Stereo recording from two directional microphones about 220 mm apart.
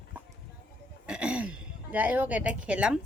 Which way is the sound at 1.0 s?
5° right (ahead or behind).